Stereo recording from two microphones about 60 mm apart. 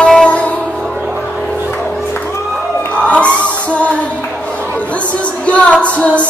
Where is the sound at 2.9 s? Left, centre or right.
Left.